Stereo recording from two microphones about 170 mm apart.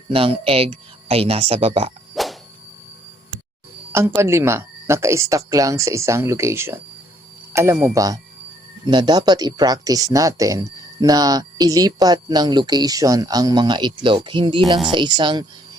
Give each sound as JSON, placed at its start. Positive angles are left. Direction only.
{"t": 0.1, "sound": "speech", "side_deg": -35}
{"t": 2.2, "sound": "a sound", "side_deg": 0}
{"t": 3.9, "sound": "speech", "side_deg": -15}